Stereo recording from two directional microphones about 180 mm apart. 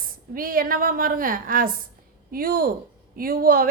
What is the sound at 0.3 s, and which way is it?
A woman's voice, 50° right (ahead or behind).